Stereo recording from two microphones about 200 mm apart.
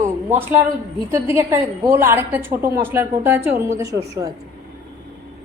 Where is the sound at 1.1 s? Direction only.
15° right (ahead or behind).